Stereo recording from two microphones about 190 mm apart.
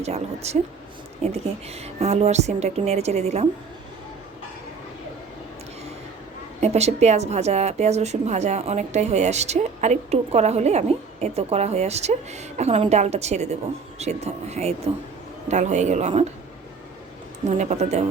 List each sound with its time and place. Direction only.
0.0 s a woman's voice: 35° right (ahead or behind)
6.6 s a woman's voice: 35° right (ahead or behind)
17.6 s a woman's voice: 35° right (ahead or behind)